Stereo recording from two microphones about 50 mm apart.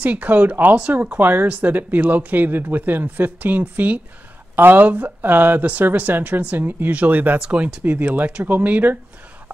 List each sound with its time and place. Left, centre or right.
0.0 s speech: right
7.3 s speech: right
7.8 s speech: right